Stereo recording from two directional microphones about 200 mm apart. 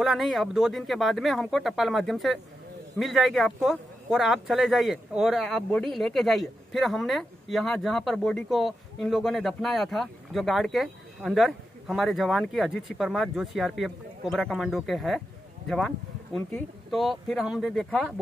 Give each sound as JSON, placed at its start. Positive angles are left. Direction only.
{"t": 0.0, "sound": "speech", "side_deg": 0}
{"t": 16.3, "sound": "speech", "side_deg": 0}